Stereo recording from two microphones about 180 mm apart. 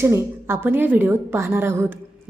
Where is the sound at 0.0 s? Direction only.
15° right (ahead or behind).